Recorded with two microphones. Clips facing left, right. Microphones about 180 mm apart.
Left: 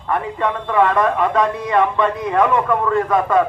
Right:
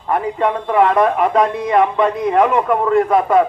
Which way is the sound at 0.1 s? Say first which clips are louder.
Right 3 dB; 20° right (ahead or behind).